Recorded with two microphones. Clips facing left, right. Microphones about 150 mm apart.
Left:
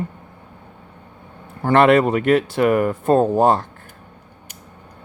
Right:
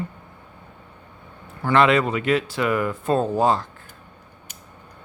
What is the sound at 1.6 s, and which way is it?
Speech, 50° left (ahead or behind).